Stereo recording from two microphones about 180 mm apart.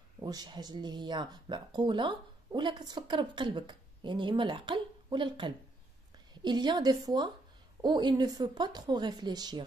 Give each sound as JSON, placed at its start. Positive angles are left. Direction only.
{"t": 0.2, "sound": "speech", "side_deg": -25}